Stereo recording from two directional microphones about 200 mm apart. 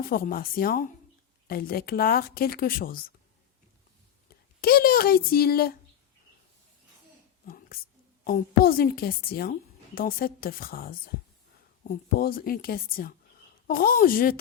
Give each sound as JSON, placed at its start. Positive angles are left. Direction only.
{"t": 0.0, "sound": "a woman's voice", "side_deg": 45}
{"t": 4.3, "sound": "speech", "side_deg": 50}
{"t": 7.4, "sound": "whispering", "side_deg": 45}
{"t": 8.2, "sound": "a woman's voice", "side_deg": 45}